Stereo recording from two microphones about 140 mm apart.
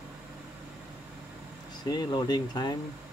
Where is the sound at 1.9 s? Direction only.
30° left (ahead or behind).